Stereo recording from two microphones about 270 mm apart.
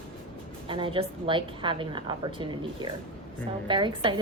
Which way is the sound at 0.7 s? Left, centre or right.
Centre.